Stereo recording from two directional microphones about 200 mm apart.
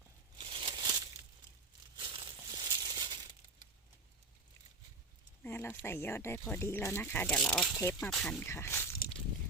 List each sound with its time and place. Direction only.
0.3 s a sound: 25° right (ahead or behind)
2.0 s crumpling: 20° right (ahead or behind)
5.4 s speech: 10° left (ahead or behind)
7.8 s speech: 10° left (ahead or behind)